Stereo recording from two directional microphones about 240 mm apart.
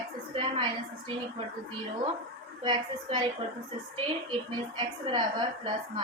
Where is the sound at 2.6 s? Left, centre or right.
Centre.